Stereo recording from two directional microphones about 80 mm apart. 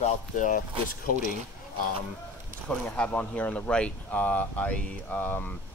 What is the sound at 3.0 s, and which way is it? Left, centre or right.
Speech, centre.